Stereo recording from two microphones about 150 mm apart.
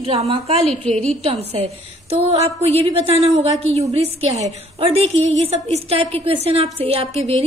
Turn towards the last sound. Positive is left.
turn(degrees=-40)  # may be behind; listen again after turning